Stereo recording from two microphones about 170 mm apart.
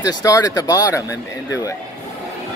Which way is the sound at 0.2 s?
20° left (ahead or behind).